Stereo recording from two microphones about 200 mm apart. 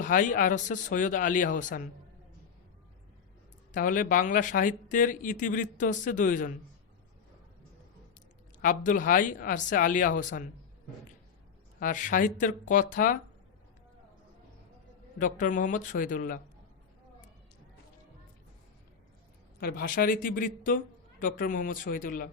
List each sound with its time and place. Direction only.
0.0 s speech: 40° left (ahead or behind)
3.7 s speech: 40° left (ahead or behind)
8.5 s speech: 40° left (ahead or behind)
11.8 s speech: 40° left (ahead or behind)
15.2 s speech: 40° left (ahead or behind)
19.5 s speech: 50° left (ahead or behind)